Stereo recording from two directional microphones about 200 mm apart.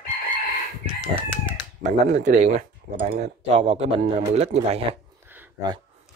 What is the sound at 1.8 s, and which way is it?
Speech, 40° right (ahead or behind).